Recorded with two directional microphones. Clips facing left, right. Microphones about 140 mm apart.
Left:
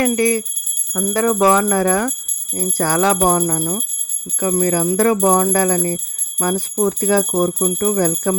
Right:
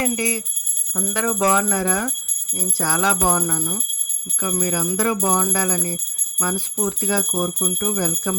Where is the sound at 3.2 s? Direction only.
40° left (ahead or behind).